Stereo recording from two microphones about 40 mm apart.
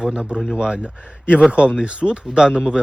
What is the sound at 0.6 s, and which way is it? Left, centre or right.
Speech, centre.